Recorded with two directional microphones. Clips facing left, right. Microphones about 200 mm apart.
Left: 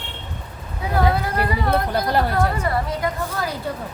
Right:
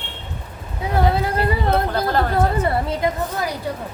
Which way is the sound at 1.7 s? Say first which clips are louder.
Right 1 dB; 10° left (ahead or behind).